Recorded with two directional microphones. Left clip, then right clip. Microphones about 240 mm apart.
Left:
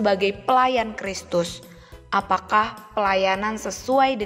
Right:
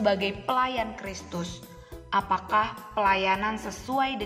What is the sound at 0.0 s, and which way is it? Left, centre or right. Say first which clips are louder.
A woman's voice: left 5 dB; left.